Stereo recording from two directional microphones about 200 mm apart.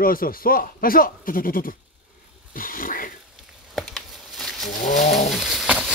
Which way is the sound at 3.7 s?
Centre (ahead or behind).